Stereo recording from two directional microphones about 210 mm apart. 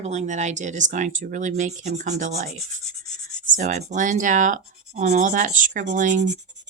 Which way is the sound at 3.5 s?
35° right (ahead or behind).